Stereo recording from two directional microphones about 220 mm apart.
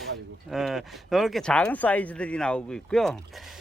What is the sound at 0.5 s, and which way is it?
Speech, centre (ahead or behind).